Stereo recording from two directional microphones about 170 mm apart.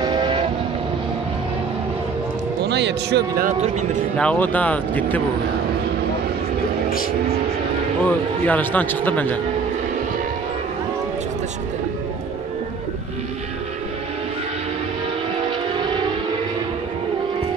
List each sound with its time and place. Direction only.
0.0 s vehicle: 25° right (ahead or behind)
2.6 s speech: 85° right
3.4 s speech: 45° right (ahead or behind)
4.2 s a man's voice: 10° left (ahead or behind)
8.0 s a man's voice: 10° left (ahead or behind)